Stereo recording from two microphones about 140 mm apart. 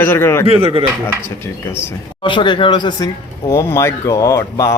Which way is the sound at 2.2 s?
35° left (ahead or behind).